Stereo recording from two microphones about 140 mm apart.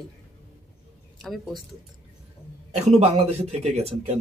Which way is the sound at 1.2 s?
Centre (ahead or behind).